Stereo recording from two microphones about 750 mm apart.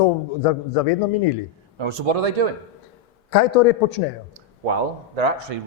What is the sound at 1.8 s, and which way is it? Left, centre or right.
Speech, right.